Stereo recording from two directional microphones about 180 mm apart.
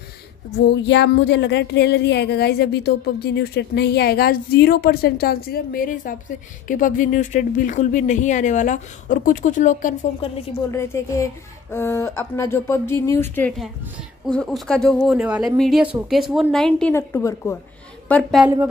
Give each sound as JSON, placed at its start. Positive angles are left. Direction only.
{"t": 0.7, "sound": "speech", "side_deg": 75}
{"t": 10.7, "sound": "a woman's voice", "side_deg": 15}
{"t": 18.4, "sound": "speech", "side_deg": -10}